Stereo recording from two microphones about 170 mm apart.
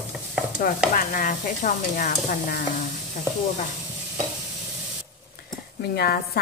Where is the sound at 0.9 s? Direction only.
50° left (ahead or behind).